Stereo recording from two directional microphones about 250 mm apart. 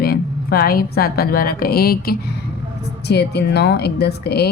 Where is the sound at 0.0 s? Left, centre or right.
Left.